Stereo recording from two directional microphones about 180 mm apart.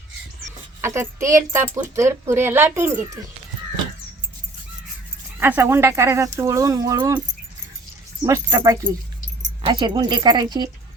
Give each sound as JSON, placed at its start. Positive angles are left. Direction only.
{"t": 0.8, "sound": "a woman's voice", "side_deg": -15}
{"t": 5.4, "sound": "a woman's voice", "side_deg": -15}
{"t": 8.2, "sound": "speech", "side_deg": -20}